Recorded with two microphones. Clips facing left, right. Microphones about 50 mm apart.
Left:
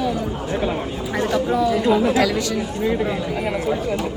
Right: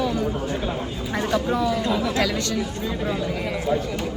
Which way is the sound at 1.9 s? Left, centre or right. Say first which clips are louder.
Left 7 dB; left.